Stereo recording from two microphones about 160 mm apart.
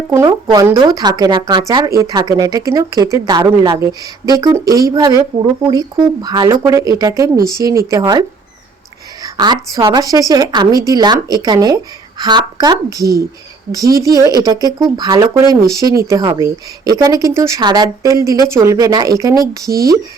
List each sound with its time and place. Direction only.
0.3 s a woman's voice: 25° right (ahead or behind)
9.2 s a woman's voice: 25° right (ahead or behind)